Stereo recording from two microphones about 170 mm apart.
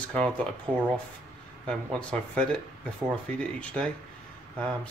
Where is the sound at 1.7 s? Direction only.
5° left (ahead or behind).